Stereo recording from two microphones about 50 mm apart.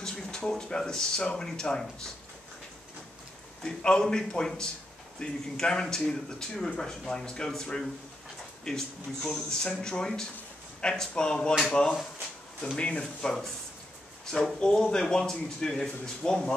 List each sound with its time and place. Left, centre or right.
0.0 s speech: centre
3.6 s speech: centre